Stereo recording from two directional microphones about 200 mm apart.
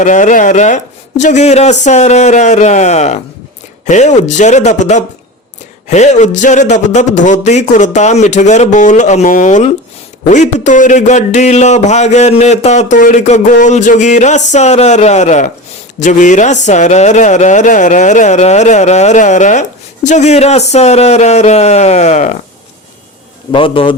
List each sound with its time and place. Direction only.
0.0 s speech: 40° left (ahead or behind)
23.5 s a man's voice: 25° left (ahead or behind)